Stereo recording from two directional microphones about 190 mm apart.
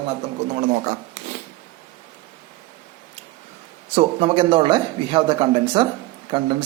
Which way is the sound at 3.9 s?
25° right (ahead or behind).